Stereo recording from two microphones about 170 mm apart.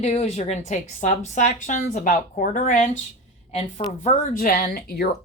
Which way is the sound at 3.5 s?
35° left (ahead or behind).